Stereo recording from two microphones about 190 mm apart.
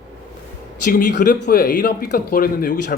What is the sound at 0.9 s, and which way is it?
A man's voice, 45° left (ahead or behind).